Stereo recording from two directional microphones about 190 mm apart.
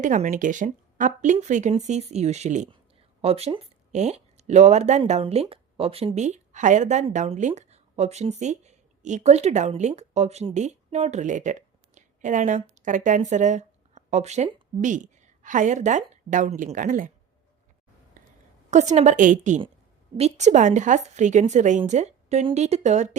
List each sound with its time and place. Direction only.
0.0 s a woman's voice: 40° right (ahead or behind)
18.2 s a sound: 45° right (ahead or behind)
18.7 s a woman's voice: 40° right (ahead or behind)